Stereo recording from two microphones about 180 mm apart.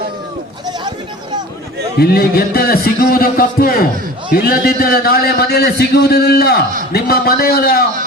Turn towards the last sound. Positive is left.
turn(degrees=55)  # may be behind; listen again after turning